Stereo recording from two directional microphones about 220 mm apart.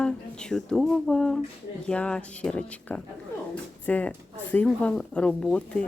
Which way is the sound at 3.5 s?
5° left (ahead or behind).